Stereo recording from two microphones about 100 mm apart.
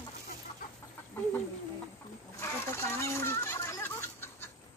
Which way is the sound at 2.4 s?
30° left (ahead or behind).